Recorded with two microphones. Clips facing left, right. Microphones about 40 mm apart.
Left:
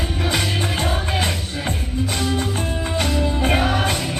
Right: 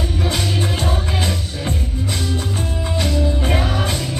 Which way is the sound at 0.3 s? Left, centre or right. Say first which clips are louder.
Left 1 dB; left.